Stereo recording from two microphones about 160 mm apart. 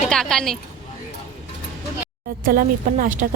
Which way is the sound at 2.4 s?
65° right (ahead or behind).